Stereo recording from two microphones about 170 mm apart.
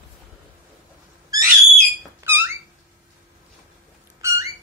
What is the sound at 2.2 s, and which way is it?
Squeak, 15° right (ahead or behind).